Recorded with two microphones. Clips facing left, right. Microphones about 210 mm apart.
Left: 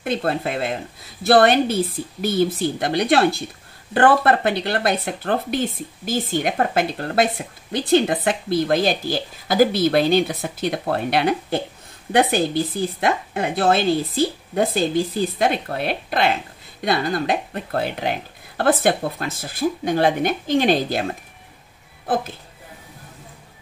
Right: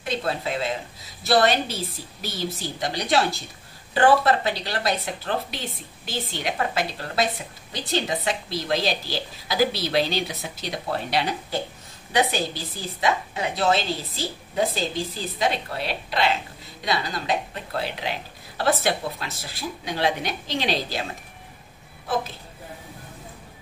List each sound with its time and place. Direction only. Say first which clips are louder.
0.0 s a woman's voice: left 5 dB; 55° left (ahead or behind)